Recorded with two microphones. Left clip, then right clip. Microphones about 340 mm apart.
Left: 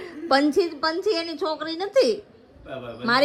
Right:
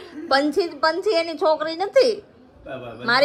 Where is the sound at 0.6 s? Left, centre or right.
Centre.